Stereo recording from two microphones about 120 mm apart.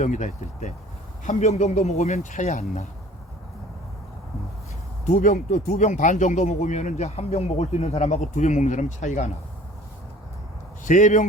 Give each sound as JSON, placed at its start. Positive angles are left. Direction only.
{"t": 0.0, "sound": "speech", "side_deg": 90}
{"t": 1.2, "sound": "speech", "side_deg": 80}
{"t": 5.0, "sound": "speech", "side_deg": 90}
{"t": 10.8, "sound": "speech", "side_deg": 90}